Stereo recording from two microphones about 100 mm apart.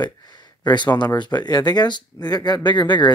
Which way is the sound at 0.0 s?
45° left (ahead or behind).